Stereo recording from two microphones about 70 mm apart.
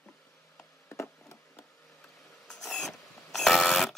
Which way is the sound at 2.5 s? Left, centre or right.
Centre.